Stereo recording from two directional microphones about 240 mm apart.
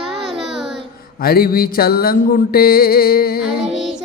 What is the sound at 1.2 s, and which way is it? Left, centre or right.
Speech, left.